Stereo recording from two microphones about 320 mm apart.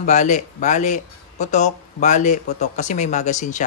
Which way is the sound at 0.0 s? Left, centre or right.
Left.